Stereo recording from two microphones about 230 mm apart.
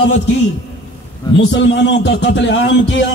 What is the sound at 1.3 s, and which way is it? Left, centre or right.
A man's voice, left.